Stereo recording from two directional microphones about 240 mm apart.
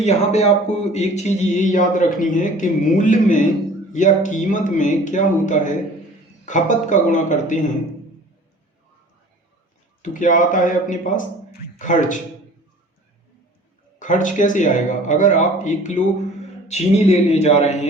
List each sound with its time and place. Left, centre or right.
0.0 s speech: left
10.0 s speech: left
14.0 s speech: left